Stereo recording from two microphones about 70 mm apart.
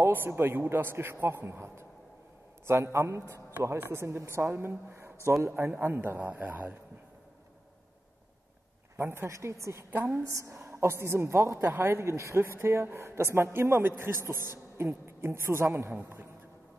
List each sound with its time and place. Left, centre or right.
0.0 s a woman's voice: right
8.9 s a woman's voice: right
9.8 s a woman's voice: right